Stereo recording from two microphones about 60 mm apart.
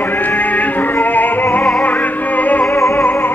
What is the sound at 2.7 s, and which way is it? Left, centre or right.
Music, left.